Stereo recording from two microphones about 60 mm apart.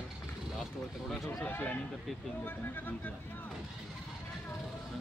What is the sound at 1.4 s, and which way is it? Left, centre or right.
Speech, left.